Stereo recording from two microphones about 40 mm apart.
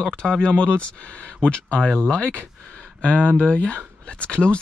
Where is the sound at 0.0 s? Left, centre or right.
Left.